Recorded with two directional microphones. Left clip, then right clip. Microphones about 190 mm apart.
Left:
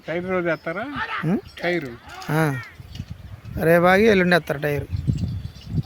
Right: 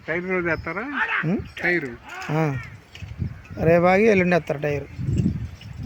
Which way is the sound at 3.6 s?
15° left (ahead or behind).